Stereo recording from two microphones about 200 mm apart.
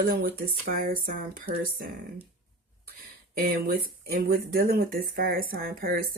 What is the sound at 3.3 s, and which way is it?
Speech, 50° right (ahead or behind).